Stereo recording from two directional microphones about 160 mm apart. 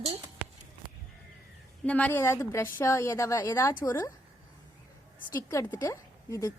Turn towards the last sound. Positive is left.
turn(degrees=20)  # may be behind; listen again after turning